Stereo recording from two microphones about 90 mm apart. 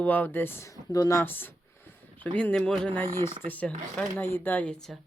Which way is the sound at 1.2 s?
20° left (ahead or behind).